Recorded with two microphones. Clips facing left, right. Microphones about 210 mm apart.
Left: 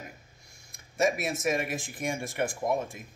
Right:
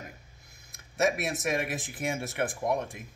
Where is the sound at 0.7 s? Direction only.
Centre (ahead or behind).